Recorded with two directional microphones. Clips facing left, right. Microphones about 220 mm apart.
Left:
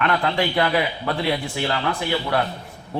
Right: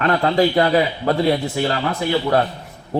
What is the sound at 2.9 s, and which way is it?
Speech, 40° right (ahead or behind).